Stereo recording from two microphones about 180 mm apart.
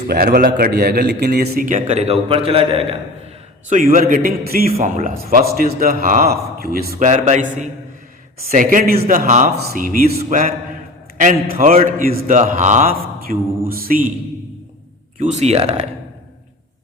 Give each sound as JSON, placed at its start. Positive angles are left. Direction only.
{"t": 0.1, "sound": "a man's voice", "side_deg": -55}
{"t": 3.7, "sound": "a man's voice", "side_deg": -50}
{"t": 4.7, "sound": "speech", "side_deg": -35}
{"t": 5.0, "sound": "a man's voice", "side_deg": -55}
{"t": 7.1, "sound": "speech", "side_deg": -40}
{"t": 8.4, "sound": "a man's voice", "side_deg": -50}
{"t": 15.2, "sound": "speech", "side_deg": -40}